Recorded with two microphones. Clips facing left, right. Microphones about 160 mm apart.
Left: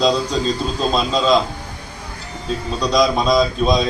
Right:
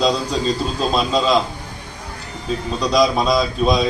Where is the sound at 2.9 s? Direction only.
5° right (ahead or behind).